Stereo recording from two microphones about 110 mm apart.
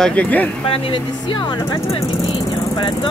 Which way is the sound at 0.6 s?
55° left (ahead or behind).